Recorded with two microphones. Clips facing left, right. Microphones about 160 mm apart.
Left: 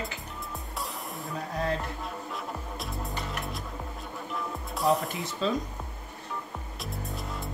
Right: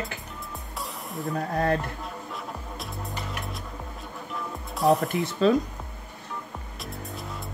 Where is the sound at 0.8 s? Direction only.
Centre (ahead or behind).